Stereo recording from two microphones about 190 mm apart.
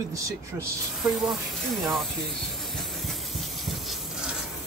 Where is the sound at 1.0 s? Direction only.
Centre (ahead or behind).